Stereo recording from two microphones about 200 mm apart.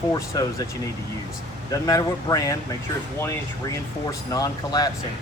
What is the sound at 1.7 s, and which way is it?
Speech, 15° left (ahead or behind).